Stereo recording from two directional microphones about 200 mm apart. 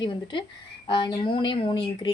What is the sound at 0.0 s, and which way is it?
A woman's voice, 25° left (ahead or behind).